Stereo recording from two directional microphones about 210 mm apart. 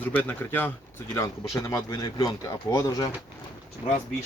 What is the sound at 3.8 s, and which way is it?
Speech, 10° right (ahead or behind).